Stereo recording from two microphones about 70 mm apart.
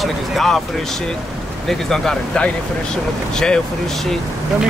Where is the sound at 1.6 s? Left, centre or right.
Centre.